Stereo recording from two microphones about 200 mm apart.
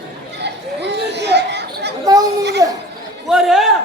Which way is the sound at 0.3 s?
60° right (ahead or behind).